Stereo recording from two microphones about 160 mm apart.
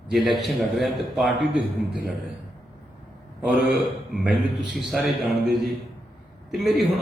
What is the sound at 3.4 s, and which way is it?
Speech, 10° right (ahead or behind).